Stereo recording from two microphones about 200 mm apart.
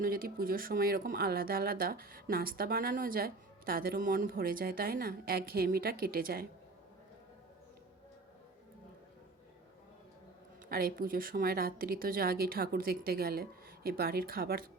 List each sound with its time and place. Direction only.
0.0 s speech: 45° right (ahead or behind)
10.7 s speech: 50° right (ahead or behind)